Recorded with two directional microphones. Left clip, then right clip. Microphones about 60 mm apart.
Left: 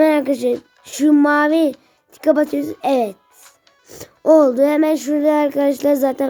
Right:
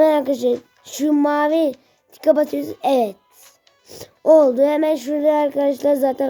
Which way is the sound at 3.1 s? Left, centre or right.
Left.